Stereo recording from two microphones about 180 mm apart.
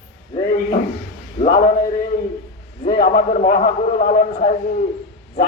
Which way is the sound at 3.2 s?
45° left (ahead or behind).